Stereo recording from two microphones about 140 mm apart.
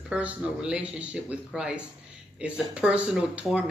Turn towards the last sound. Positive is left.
turn(degrees=-5)  # may be behind; listen again after turning